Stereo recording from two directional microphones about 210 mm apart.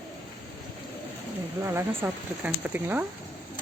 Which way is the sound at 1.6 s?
10° right (ahead or behind).